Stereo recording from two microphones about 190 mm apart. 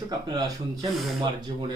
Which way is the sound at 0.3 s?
20° right (ahead or behind).